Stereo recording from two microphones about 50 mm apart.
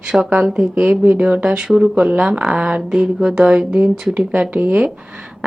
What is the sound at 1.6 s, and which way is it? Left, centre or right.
Speech, centre.